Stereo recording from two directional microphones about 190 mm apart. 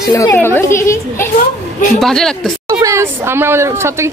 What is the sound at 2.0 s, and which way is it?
Speech, centre (ahead or behind).